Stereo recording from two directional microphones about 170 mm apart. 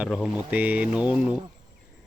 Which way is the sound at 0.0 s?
5° right (ahead or behind).